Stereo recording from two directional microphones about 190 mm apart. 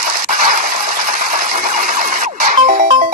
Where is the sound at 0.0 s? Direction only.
40° right (ahead or behind).